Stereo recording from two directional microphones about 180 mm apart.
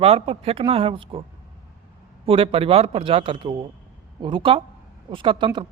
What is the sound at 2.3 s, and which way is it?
A man's voice, 30° right (ahead or behind).